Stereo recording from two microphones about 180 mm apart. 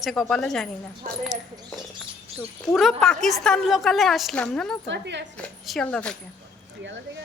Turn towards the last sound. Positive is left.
turn(degrees=5)  # may be behind; listen again after turning